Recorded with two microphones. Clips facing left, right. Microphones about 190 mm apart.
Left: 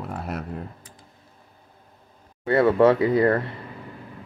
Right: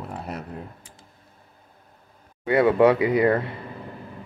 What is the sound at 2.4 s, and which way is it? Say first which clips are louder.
Speech: even; 20° right (ahead or behind).